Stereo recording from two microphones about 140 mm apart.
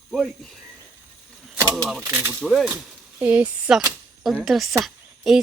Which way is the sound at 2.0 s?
20° right (ahead or behind).